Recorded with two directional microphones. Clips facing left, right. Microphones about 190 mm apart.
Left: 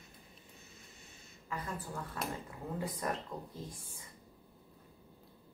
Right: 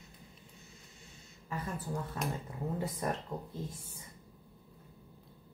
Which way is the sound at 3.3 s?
20° right (ahead or behind).